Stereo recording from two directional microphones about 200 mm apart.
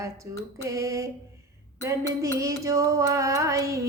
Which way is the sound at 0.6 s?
15° right (ahead or behind).